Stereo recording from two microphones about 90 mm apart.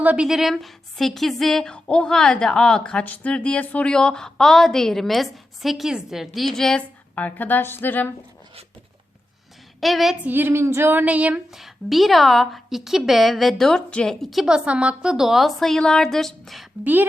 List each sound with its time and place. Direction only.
0.0 s speech: 15° right (ahead or behind)
0.3 s speech: centre (ahead or behind)
7.2 s a woman's voice: 20° left (ahead or behind)
9.8 s speech: centre (ahead or behind)
10.2 s speech: 20° right (ahead or behind)
11.5 s speech: centre (ahead or behind)
16.8 s speech: 20° right (ahead or behind)